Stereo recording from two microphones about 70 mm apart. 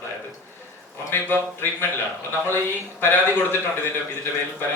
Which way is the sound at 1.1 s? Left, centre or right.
Left.